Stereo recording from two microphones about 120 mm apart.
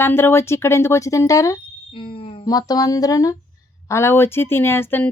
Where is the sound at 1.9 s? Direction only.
50° left (ahead or behind).